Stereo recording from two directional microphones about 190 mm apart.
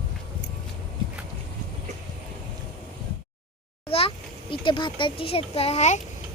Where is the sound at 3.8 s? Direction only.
30° left (ahead or behind).